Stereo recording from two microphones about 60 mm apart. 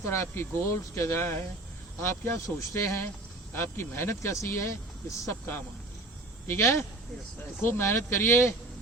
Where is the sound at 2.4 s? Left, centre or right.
Left.